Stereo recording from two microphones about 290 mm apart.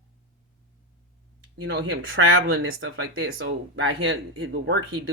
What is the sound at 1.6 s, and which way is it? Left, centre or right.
Speech, right.